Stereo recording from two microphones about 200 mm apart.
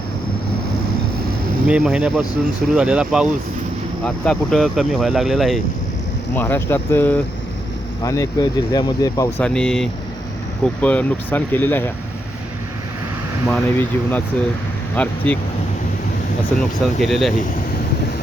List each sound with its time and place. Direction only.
1.6 s speech: 5° right (ahead or behind)
6.3 s speech: 10° left (ahead or behind)
9.4 s speech: 5° left (ahead or behind)
13.5 s speech: 10° left (ahead or behind)
16.6 s speech: centre (ahead or behind)